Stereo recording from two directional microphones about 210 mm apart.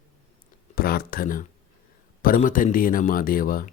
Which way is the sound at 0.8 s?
45° left (ahead or behind).